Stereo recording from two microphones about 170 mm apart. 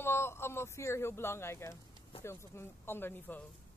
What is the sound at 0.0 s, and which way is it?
Speech, 15° left (ahead or behind).